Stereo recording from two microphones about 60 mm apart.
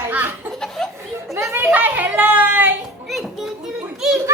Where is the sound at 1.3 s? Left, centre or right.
Right.